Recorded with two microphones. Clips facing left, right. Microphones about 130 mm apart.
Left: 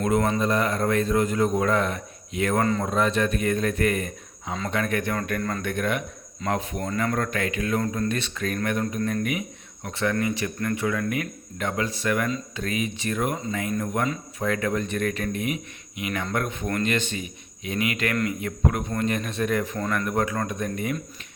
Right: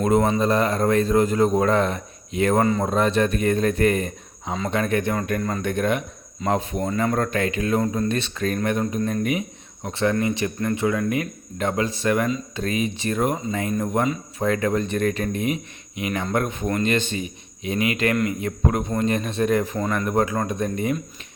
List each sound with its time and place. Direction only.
0.0 s a man's voice: 25° right (ahead or behind)
5.4 s speech: 10° right (ahead or behind)
5.6 s a man's voice: 25° right (ahead or behind)
19.7 s speech: 15° right (ahead or behind)
20.1 s a man's voice: 25° right (ahead or behind)